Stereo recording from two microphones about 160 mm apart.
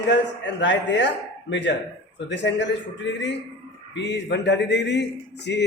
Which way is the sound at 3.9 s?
90° left.